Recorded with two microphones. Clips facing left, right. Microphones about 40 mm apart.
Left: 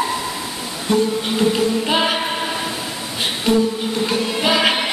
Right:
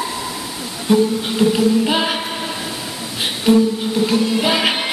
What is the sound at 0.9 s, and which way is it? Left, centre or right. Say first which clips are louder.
Music: right 3 dB; centre.